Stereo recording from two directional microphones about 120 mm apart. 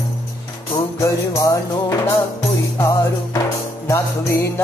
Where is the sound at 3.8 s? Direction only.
25° left (ahead or behind).